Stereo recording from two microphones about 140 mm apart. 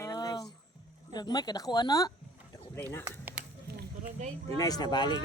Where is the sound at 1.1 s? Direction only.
30° left (ahead or behind).